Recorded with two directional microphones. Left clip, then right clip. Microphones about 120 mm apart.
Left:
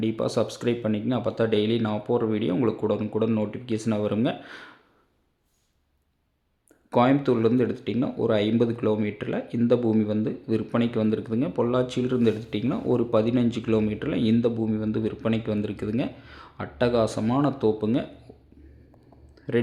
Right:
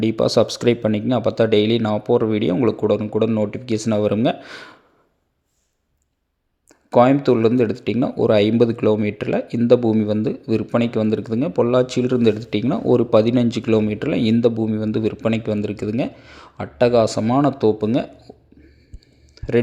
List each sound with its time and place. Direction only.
0.0 s speech: 45° right (ahead or behind)
6.7 s speech: 30° right (ahead or behind)
19.3 s a sound: 35° right (ahead or behind)